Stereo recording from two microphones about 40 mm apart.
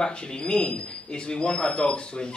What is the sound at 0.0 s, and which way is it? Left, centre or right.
A man's voice, left.